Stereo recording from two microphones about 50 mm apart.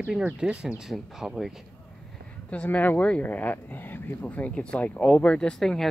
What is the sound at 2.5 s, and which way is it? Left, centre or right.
Speech, left.